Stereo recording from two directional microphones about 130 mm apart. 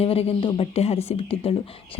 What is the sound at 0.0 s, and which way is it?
A woman's voice, 50° left (ahead or behind).